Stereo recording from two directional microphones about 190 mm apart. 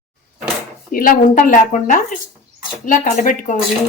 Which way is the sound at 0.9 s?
50° left (ahead or behind).